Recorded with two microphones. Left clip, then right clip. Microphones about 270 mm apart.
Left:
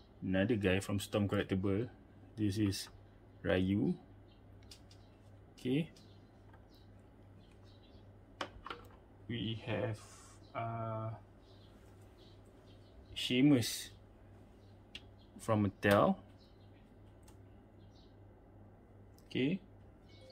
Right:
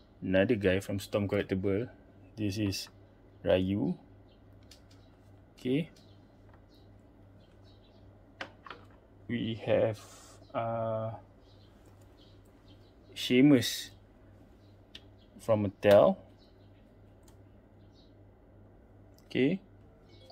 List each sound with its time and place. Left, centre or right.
0.2 s speech: centre
5.6 s speech: centre
9.3 s speech: centre
10.5 s a sound: right
13.1 s speech: centre
15.3 s speech: centre
19.2 s speech: centre